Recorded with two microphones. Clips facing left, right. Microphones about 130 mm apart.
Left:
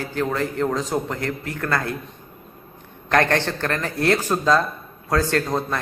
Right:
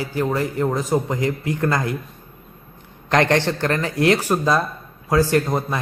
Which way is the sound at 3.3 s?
15° right (ahead or behind).